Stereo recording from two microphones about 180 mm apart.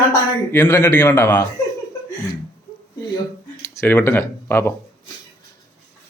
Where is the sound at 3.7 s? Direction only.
10° left (ahead or behind).